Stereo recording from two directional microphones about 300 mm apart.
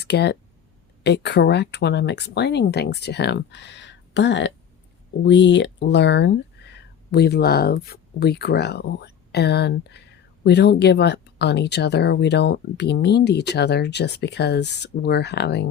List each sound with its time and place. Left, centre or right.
0.0 s speech: left